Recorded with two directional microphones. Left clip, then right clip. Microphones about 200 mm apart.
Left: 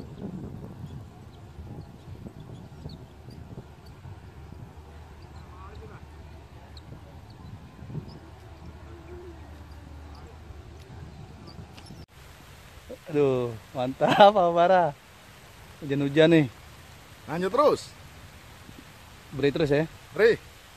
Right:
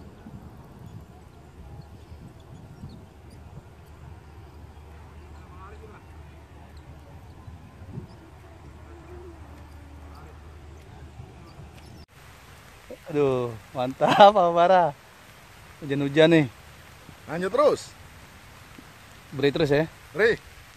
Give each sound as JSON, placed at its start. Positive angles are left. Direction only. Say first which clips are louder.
{"t": 13.1, "sound": "speech", "louder": "even", "side_deg": -15}
{"t": 17.3, "sound": "speech", "louder": "right 1 dB", "side_deg": 15}
{"t": 19.3, "sound": "speech", "louder": "right 2 dB", "side_deg": -25}
{"t": 20.1, "sound": "speech", "louder": "left 1 dB", "side_deg": 10}